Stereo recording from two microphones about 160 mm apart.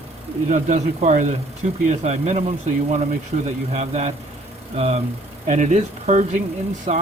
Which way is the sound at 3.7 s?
45° right (ahead or behind).